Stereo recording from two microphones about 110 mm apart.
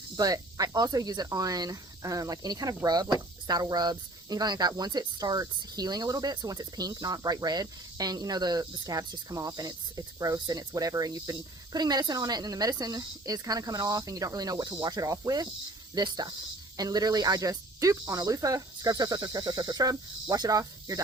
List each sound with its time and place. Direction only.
0.2 s speech: 35° right (ahead or behind)